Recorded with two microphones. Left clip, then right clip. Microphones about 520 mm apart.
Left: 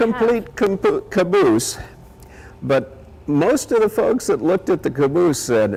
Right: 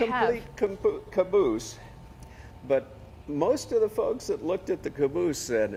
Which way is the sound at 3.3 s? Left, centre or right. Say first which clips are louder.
Left 8 dB; left.